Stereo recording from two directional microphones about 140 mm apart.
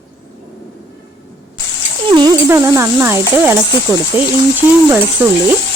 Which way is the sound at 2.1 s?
30° right (ahead or behind).